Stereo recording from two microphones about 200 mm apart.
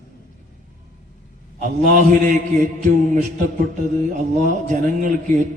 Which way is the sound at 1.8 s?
40° right (ahead or behind).